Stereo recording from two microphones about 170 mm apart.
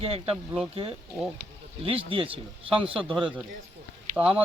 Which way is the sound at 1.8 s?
30° right (ahead or behind).